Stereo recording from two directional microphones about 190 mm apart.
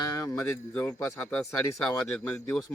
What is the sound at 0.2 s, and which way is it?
Speech, 15° left (ahead or behind).